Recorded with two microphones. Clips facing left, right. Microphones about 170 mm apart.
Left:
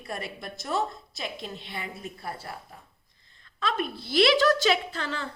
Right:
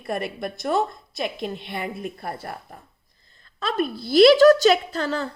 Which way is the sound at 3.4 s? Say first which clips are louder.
Right 5 dB; 35° right (ahead or behind).